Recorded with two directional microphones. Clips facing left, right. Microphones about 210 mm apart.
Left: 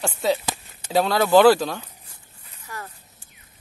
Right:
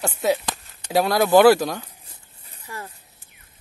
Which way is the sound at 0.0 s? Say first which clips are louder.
Right 1 dB; 5° right (ahead or behind).